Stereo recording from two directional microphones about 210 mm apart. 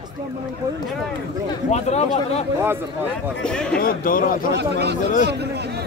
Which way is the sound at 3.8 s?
40° left (ahead or behind).